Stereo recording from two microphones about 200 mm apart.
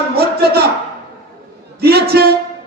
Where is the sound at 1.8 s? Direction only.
50° right (ahead or behind).